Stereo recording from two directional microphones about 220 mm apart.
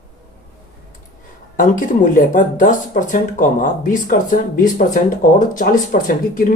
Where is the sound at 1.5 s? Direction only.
35° left (ahead or behind).